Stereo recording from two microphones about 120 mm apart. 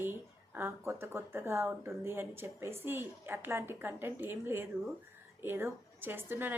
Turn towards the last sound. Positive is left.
turn(degrees=-20)  # may be behind; listen again after turning